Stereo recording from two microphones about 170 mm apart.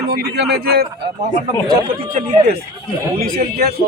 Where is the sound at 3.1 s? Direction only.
60° right (ahead or behind).